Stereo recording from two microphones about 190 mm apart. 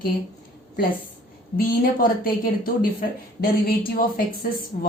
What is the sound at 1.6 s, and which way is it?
A woman's voice, 50° left (ahead or behind).